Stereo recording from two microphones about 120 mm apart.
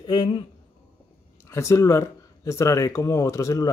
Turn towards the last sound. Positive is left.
turn(degrees=30)  # may be behind; listen again after turning